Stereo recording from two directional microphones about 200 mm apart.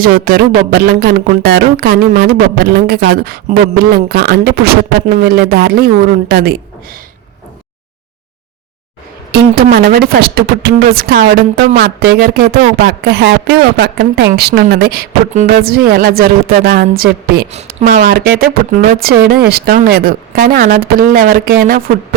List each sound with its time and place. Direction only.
0.0 s a woman's voice: 45° right (ahead or behind)
9.3 s a woman's voice: 50° right (ahead or behind)